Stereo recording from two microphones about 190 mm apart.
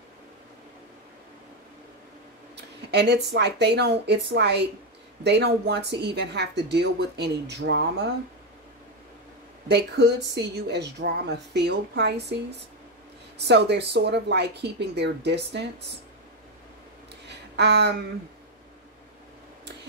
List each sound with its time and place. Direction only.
2.5 s speech: 60° right (ahead or behind)
9.7 s speech: 60° right (ahead or behind)
17.3 s a sound: 65° right (ahead or behind)